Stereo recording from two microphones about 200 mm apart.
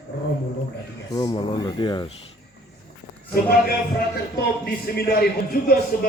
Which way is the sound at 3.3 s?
50° left (ahead or behind).